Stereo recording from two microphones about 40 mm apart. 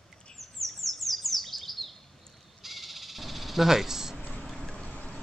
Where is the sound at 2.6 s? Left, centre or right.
Centre.